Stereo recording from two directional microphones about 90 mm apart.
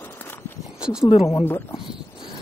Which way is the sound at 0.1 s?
25° left (ahead or behind).